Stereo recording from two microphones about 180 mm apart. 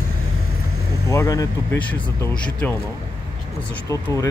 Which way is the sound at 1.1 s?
20° left (ahead or behind).